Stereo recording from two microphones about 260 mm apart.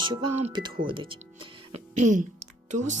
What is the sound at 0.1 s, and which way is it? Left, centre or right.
Speech, centre.